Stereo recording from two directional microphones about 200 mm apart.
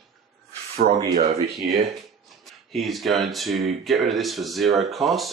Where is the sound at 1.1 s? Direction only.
35° right (ahead or behind).